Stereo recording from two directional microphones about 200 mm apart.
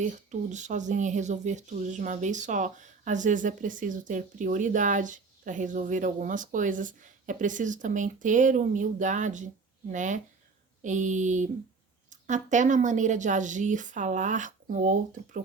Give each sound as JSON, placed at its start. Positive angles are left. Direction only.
{"t": 0.0, "sound": "speech", "side_deg": -35}